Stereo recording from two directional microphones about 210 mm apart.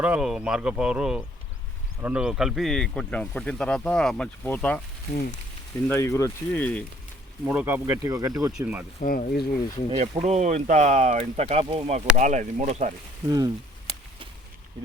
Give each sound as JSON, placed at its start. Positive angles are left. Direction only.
{"t": 0.0, "sound": "speech", "side_deg": -5}
{"t": 5.1, "sound": "speech", "side_deg": 45}
{"t": 5.9, "sound": "speech", "side_deg": 15}
{"t": 7.4, "sound": "speech", "side_deg": -5}
{"t": 9.0, "sound": "speech", "side_deg": 45}
{"t": 10.0, "sound": "speech", "side_deg": -30}
{"t": 13.2, "sound": "speech", "side_deg": -20}